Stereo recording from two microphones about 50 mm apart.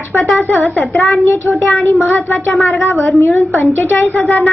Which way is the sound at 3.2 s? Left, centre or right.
Left.